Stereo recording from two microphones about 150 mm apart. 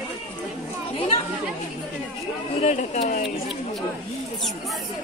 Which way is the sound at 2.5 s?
50° left (ahead or behind).